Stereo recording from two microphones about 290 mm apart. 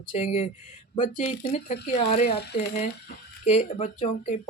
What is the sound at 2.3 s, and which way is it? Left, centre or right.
Speech, left.